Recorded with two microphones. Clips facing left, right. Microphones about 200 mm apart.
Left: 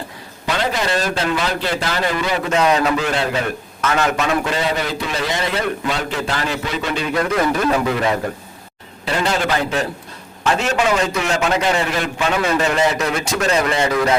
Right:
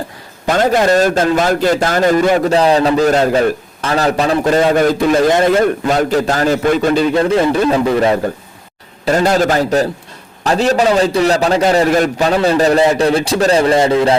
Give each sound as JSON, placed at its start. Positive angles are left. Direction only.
{"t": 0.4, "sound": "a man's voice", "side_deg": -45}
{"t": 7.1, "sound": "a man's voice", "side_deg": -30}
{"t": 9.0, "sound": "a man's voice", "side_deg": -45}